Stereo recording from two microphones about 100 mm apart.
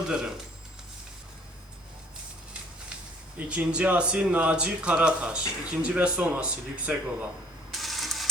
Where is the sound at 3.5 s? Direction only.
15° right (ahead or behind).